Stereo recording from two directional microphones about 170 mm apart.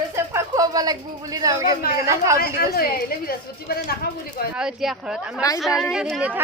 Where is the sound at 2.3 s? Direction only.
60° left (ahead or behind).